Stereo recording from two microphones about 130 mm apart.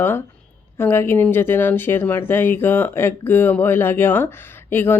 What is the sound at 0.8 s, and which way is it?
Speech, 15° left (ahead or behind).